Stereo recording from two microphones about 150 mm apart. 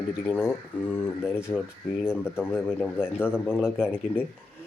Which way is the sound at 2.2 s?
15° left (ahead or behind).